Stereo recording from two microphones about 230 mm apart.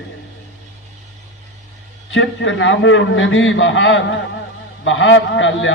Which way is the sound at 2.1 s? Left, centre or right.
Left.